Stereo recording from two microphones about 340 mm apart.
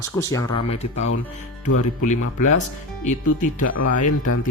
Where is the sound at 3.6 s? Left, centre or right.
Left.